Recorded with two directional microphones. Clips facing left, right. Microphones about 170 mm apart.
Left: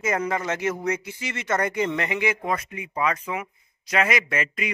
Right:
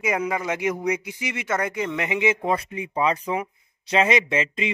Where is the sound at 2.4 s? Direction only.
30° right (ahead or behind).